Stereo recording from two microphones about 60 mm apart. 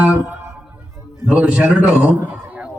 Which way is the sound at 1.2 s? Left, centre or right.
Centre.